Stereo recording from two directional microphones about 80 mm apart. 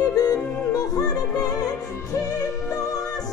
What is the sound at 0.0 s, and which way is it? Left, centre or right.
Music, left.